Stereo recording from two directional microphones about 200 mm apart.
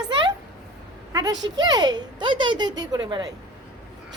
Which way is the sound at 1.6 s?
20° right (ahead or behind).